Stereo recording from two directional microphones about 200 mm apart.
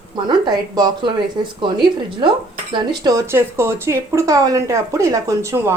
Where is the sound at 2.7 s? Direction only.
20° right (ahead or behind).